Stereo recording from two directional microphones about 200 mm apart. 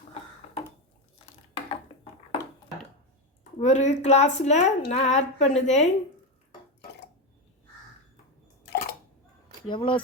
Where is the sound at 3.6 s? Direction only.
35° left (ahead or behind).